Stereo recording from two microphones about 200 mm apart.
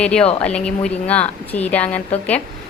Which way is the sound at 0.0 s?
5° left (ahead or behind).